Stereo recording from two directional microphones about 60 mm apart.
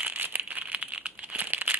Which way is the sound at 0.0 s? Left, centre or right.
Right.